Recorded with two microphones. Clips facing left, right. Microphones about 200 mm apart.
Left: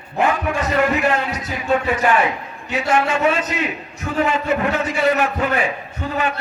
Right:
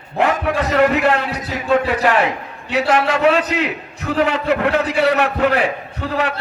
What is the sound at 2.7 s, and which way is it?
A man's voice, 70° right (ahead or behind).